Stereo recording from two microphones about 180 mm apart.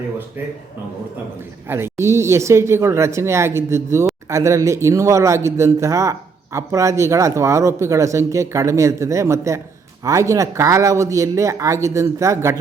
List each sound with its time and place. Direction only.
1.6 s speech: 15° right (ahead or behind)